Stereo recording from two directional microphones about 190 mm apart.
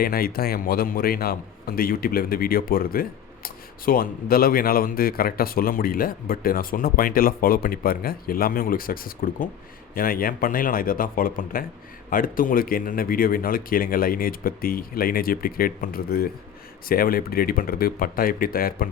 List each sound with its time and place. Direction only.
0.0 s a man's voice: 50° left (ahead or behind)